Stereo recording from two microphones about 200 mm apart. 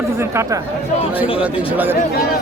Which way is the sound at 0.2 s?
15° right (ahead or behind).